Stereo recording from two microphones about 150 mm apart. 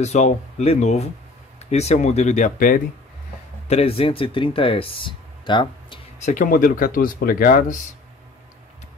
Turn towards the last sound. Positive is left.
turn(degrees=70)  # may be behind; listen again after turning